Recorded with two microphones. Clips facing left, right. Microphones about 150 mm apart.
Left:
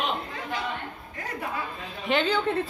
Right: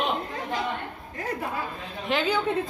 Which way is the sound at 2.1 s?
Centre (ahead or behind).